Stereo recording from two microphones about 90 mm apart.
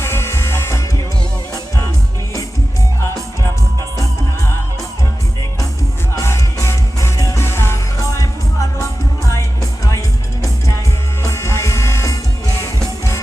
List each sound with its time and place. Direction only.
0.0 s music: 30° left (ahead or behind)
6.1 s music: 35° left (ahead or behind)
8.8 s music: 35° left (ahead or behind)
11.2 s music: 35° left (ahead or behind)